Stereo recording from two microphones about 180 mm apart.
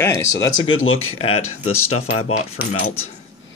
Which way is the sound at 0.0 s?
15° left (ahead or behind).